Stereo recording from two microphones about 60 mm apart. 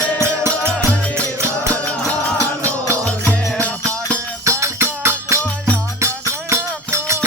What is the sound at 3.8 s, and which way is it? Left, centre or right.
Music, right.